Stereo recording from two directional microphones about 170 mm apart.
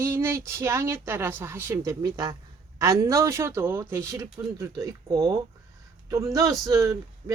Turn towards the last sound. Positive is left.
turn(degrees=-20)  # may be behind; listen again after turning